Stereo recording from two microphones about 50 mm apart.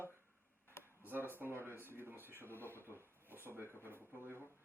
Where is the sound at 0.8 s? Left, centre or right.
Right.